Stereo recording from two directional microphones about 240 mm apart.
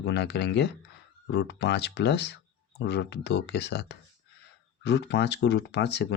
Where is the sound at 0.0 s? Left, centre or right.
Left.